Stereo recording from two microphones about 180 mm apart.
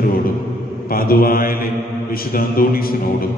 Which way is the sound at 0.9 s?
55° left (ahead or behind).